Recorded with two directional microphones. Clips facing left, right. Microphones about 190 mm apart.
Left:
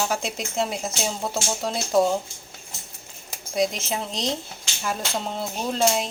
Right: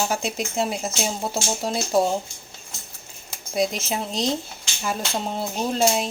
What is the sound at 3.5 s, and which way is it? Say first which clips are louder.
Speech: even; centre (ahead or behind).